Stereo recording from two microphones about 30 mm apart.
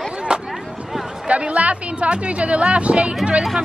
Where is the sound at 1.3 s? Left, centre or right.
Right.